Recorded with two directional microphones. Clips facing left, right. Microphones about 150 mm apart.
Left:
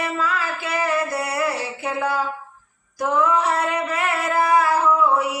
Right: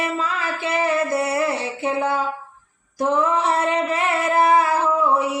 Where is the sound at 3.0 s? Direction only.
25° right (ahead or behind).